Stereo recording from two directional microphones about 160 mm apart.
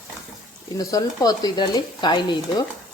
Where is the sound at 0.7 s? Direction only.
20° left (ahead or behind).